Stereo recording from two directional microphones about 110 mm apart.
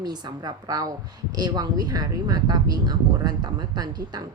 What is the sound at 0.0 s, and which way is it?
Speech, 35° right (ahead or behind).